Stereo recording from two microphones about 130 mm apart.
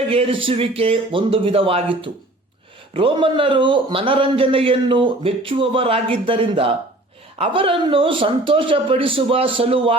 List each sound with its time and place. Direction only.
0.1 s speech: 45° right (ahead or behind)